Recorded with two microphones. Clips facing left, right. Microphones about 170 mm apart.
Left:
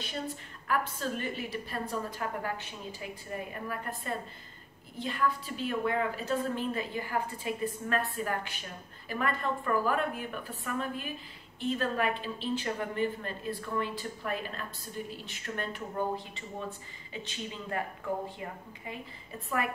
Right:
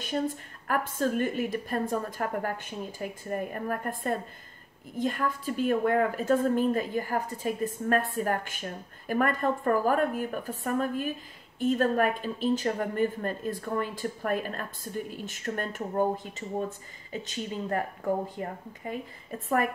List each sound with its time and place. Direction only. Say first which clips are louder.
0.1 s a woman's voice: right 10 dB; 50° right (ahead or behind)